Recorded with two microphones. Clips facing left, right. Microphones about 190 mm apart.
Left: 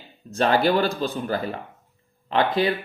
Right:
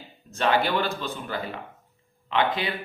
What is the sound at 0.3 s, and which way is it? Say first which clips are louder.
A man's voice: left 4 dB; 35° left (ahead or behind).